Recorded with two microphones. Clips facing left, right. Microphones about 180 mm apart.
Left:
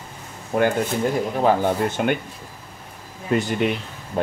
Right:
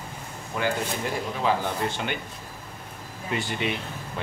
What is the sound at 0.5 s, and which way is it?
Speech, 50° left (ahead or behind).